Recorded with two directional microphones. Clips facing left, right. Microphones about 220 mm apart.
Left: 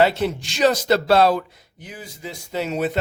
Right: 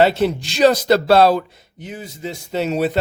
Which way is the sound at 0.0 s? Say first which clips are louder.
Right 3 dB; 30° right (ahead or behind).